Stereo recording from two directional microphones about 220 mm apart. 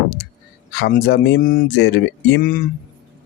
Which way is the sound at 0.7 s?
45° left (ahead or behind).